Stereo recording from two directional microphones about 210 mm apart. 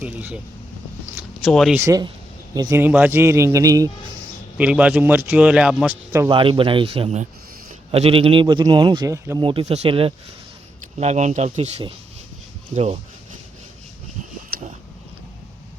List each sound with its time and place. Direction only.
0.0 s a man's voice: 5° right (ahead or behind)
1.1 s a sound: centre (ahead or behind)
1.8 s a man's voice: 15° right (ahead or behind)
4.5 s a man's voice: 5° right (ahead or behind)
6.3 s a man's voice: 25° right (ahead or behind)
14.5 s a sound: 45° right (ahead or behind)